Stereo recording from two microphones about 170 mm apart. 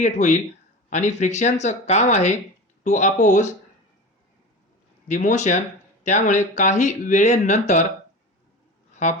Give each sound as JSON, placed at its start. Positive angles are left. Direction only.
{"t": 0.0, "sound": "speech", "side_deg": 45}
{"t": 5.0, "sound": "speech", "side_deg": 45}
{"t": 9.0, "sound": "speech", "side_deg": 45}